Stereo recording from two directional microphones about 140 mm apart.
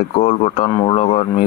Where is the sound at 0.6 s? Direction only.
35° left (ahead or behind).